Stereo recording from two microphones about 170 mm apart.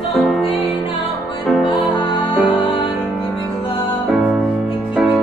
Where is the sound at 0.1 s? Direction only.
Centre (ahead or behind).